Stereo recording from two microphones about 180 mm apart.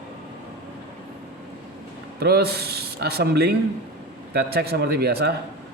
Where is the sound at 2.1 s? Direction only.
60° right (ahead or behind).